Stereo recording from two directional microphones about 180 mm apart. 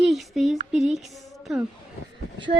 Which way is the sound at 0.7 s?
Centre (ahead or behind).